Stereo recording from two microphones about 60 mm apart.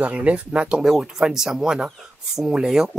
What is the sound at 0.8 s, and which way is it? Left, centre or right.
Speech, centre.